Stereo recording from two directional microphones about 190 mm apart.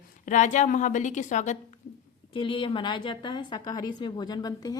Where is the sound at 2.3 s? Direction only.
25° left (ahead or behind).